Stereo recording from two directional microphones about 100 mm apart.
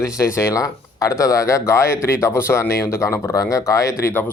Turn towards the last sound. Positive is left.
turn(degrees=35)  # may be behind; listen again after turning